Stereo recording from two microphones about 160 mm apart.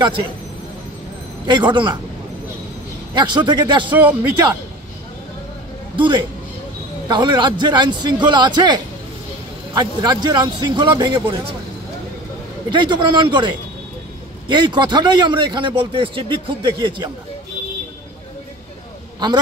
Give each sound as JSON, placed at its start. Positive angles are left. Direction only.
{"t": 1.4, "sound": "a man's voice", "side_deg": -30}
{"t": 3.2, "sound": "a man's voice", "side_deg": -30}
{"t": 3.9, "sound": "speech", "side_deg": -10}
{"t": 5.9, "sound": "a man's voice", "side_deg": -30}
{"t": 12.6, "sound": "a man's voice", "side_deg": -30}